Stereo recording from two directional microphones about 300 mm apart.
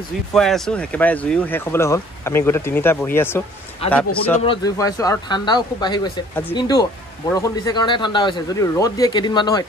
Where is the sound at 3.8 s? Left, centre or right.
Centre.